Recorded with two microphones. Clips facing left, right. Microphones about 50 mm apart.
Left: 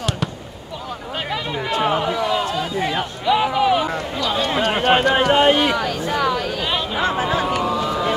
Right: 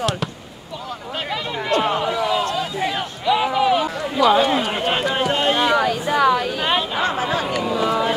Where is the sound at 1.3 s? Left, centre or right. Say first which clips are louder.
Right 2 dB; centre.